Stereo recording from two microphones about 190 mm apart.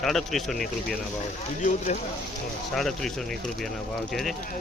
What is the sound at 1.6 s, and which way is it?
Speech, 40° left (ahead or behind).